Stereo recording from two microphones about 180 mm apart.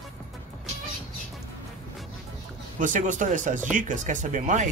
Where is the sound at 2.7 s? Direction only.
45° right (ahead or behind).